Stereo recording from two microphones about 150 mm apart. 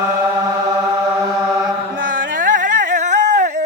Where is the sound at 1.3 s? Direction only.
5° right (ahead or behind).